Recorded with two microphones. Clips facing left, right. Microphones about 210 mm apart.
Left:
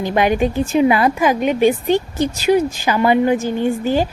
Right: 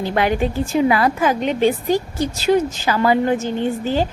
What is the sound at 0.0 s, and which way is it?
A woman's voice, 15° left (ahead or behind).